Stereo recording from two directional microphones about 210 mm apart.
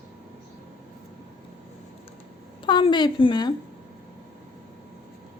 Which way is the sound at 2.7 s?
20° left (ahead or behind).